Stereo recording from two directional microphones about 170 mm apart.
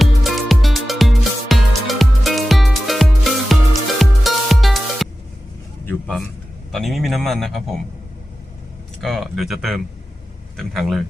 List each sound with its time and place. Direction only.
0.0 s music: centre (ahead or behind)
5.9 s a sound: centre (ahead or behind)
6.7 s a man's voice: centre (ahead or behind)
9.0 s speech: centre (ahead or behind)